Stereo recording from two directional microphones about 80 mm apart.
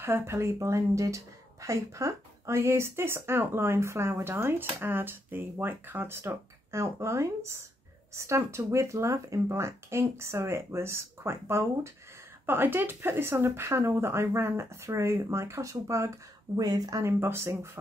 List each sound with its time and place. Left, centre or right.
0.0 s speech: right
16.5 s speech: right
17.0 s speech: right